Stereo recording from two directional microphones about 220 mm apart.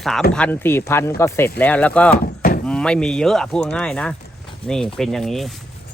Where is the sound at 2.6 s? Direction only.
5° left (ahead or behind).